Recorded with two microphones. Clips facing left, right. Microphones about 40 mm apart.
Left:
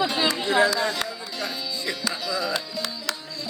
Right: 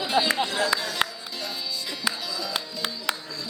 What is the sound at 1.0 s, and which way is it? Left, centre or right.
Music, right.